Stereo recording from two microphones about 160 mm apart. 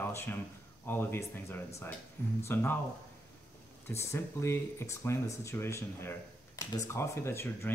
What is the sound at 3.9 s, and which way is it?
Speech, 15° left (ahead or behind).